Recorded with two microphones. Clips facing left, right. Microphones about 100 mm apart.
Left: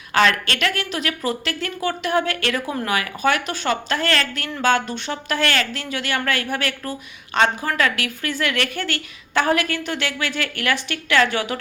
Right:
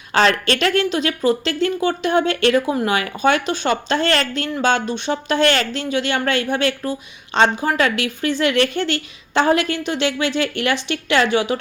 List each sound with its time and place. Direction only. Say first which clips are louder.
0.1 s speech: right 2 dB; 30° right (ahead or behind)